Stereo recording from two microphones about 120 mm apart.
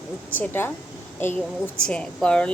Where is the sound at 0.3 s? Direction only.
15° left (ahead or behind).